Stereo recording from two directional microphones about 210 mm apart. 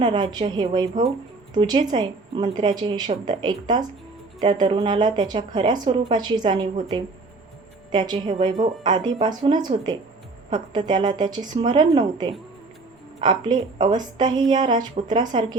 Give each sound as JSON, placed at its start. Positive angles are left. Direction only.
{"t": 0.0, "sound": "a woman's voice", "side_deg": -20}
{"t": 7.9, "sound": "a woman's voice", "side_deg": -25}